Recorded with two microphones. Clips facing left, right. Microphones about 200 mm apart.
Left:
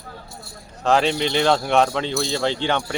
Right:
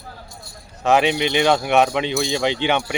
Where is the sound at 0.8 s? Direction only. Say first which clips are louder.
Right 2 dB; 15° right (ahead or behind).